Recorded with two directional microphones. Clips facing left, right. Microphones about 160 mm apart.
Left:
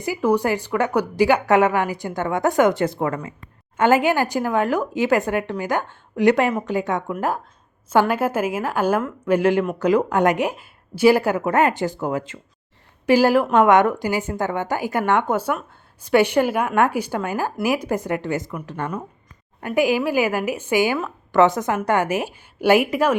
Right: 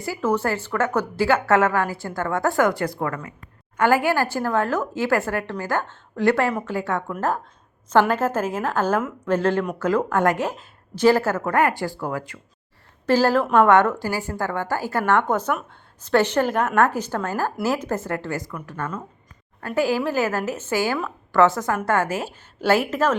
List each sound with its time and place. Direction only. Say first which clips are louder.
0.0 s a woman's voice: left 3 dB; 15° left (ahead or behind)